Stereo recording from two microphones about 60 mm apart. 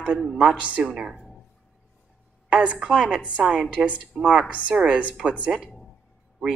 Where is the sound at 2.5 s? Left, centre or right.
Centre.